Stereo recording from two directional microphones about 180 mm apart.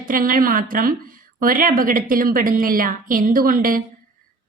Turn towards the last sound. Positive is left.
turn(degrees=-50)  # may be behind; listen again after turning